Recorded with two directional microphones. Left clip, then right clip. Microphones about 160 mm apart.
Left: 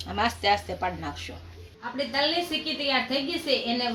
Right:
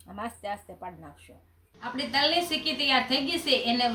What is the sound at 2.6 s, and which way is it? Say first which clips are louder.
A woman's voice: right 1 dB; 5° right (ahead or behind).